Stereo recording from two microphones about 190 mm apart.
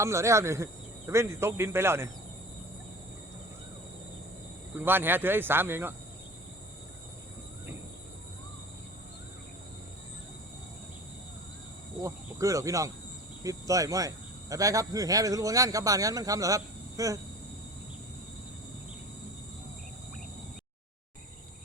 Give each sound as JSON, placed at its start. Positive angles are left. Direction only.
{"t": 0.0, "sound": "speech", "side_deg": -15}
{"t": 4.7, "sound": "speech", "side_deg": -10}
{"t": 12.0, "sound": "speech", "side_deg": -15}